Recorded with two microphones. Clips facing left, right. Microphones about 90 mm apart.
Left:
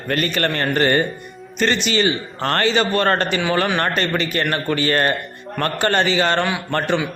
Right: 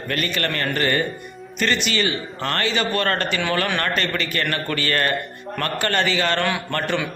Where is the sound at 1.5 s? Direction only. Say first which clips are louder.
Left 3 dB; 25° left (ahead or behind).